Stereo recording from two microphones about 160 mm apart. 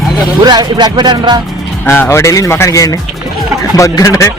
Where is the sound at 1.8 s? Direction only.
15° left (ahead or behind).